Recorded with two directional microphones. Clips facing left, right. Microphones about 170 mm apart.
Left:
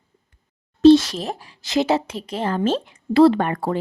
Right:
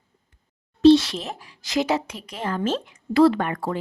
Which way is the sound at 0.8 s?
45° left (ahead or behind).